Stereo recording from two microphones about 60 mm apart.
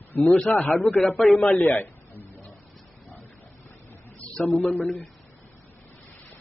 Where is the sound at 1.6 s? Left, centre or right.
Left.